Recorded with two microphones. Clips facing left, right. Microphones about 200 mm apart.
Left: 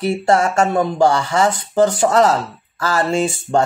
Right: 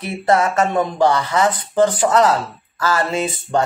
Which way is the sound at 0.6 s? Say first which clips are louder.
Left 2 dB; 45° left (ahead or behind).